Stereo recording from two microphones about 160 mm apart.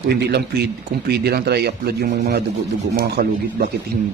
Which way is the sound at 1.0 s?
85° right.